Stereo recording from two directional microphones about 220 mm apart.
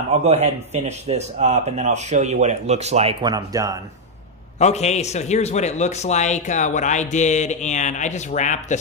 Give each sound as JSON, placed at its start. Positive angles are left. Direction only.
{"t": 0.2, "sound": "speech", "side_deg": -30}
{"t": 4.6, "sound": "a man's voice", "side_deg": 30}